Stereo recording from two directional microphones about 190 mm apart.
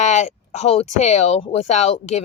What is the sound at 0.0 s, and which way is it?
Speech, 40° left (ahead or behind).